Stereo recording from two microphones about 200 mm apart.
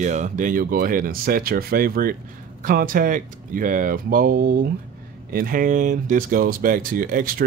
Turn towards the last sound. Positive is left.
turn(degrees=-45)  # may be behind; listen again after turning